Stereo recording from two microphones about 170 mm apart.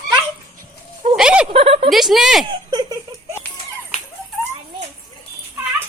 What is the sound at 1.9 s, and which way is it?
Speech, centre (ahead or behind).